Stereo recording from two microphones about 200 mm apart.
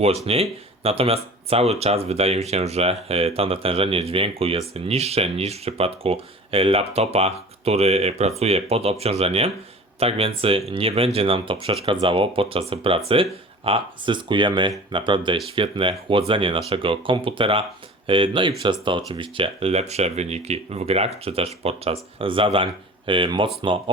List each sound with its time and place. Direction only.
0.3 s speech: 30° right (ahead or behind)